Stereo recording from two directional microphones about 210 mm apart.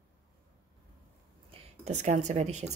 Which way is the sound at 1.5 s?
30° right (ahead or behind).